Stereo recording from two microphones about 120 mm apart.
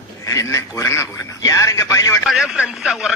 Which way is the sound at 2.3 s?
5° right (ahead or behind).